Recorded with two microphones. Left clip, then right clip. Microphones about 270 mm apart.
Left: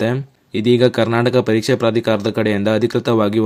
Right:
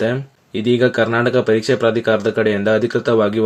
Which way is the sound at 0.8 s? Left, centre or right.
Left.